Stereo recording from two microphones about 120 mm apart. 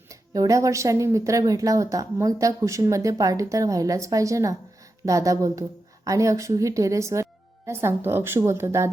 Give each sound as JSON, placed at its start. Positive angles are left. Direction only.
{"t": 0.1, "sound": "speech", "side_deg": -30}